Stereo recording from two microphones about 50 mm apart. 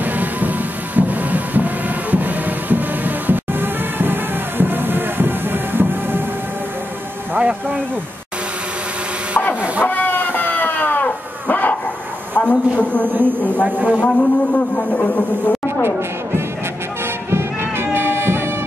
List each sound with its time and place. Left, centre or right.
0.0 s music: right
7.3 s a sound: right
9.8 s dog: left
12.4 s a man's voice: left
13.1 s speech: right
13.9 s a man's voice: left
15.8 s speech: right
17.3 s music: right